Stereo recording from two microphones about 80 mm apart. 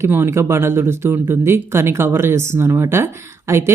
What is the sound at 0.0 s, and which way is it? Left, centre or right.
Speech, right.